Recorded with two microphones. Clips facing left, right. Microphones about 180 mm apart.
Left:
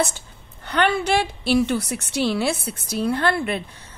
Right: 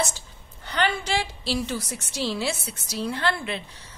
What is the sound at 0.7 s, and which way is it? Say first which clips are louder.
A woman's voice: left 5 dB; 60° left (ahead or behind).